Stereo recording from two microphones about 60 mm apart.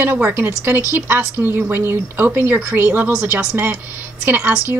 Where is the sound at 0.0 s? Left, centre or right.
Right.